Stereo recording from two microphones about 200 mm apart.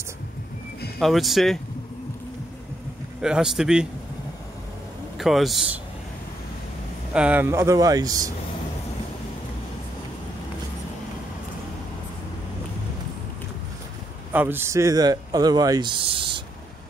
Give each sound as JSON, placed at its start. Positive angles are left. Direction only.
{"t": 0.9, "sound": "a man's voice", "side_deg": 0}
{"t": 3.2, "sound": "a man's voice", "side_deg": -5}
{"t": 5.1, "sound": "a man's voice", "side_deg": 0}
{"t": 7.2, "sound": "speech", "side_deg": -10}
{"t": 14.3, "sound": "speech", "side_deg": -10}